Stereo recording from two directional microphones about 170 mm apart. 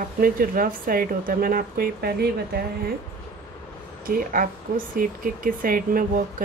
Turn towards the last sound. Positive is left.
turn(degrees=-55)  # may be behind; listen again after turning